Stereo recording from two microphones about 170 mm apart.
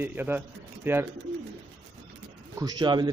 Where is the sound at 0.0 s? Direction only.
10° right (ahead or behind).